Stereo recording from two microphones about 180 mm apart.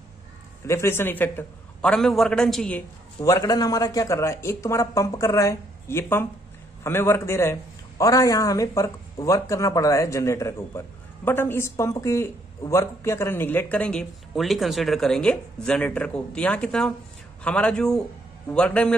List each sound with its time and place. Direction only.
0.7 s speech: 15° left (ahead or behind)
3.2 s a man's voice: 20° left (ahead or behind)